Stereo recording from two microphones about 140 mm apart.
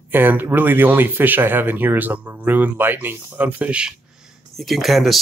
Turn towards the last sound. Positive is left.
turn(degrees=0)  # may be behind; listen again after turning